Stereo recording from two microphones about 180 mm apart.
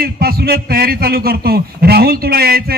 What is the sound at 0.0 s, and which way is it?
A man's voice, 55° right (ahead or behind).